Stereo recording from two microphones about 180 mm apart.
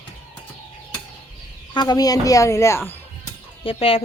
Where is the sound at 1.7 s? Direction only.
25° left (ahead or behind).